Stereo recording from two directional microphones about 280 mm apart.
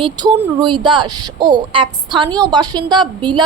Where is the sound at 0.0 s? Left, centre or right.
Centre.